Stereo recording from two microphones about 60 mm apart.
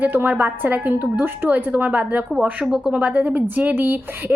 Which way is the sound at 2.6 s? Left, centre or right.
Centre.